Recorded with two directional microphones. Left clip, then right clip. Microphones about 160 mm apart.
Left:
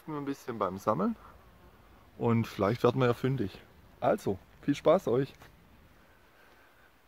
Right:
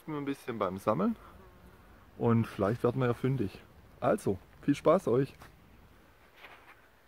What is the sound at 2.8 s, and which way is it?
Speech, 65° left (ahead or behind).